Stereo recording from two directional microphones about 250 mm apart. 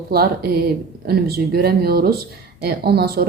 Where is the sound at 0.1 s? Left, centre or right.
Right.